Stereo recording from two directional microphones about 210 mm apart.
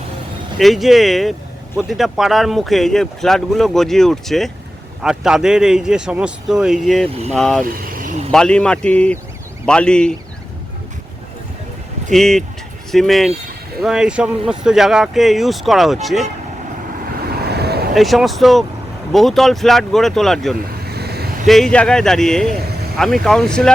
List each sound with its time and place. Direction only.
0.6 s speech: centre (ahead or behind)
7.7 s vehicle: 40° right (ahead or behind)
8.3 s speech: 5° left (ahead or behind)
12.1 s speech: centre (ahead or behind)
17.2 s vehicle: 50° right (ahead or behind)
17.9 s speech: centre (ahead or behind)
20.8 s vehicle: 50° right (ahead or behind)
21.4 s speech: centre (ahead or behind)